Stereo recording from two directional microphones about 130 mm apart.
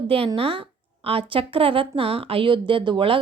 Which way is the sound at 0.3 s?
45° right (ahead or behind).